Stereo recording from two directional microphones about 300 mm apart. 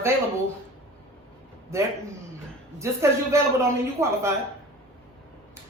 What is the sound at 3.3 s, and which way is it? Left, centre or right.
Speech, centre.